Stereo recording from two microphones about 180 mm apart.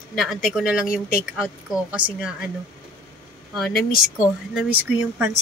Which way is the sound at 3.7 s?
55° left (ahead or behind).